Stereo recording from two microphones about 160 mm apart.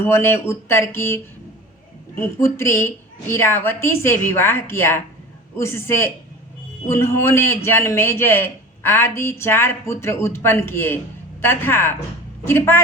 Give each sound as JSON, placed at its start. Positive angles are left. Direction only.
{"t": 0.0, "sound": "a man's voice", "side_deg": 15}